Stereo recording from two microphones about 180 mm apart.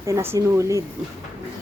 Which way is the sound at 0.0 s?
15° right (ahead or behind).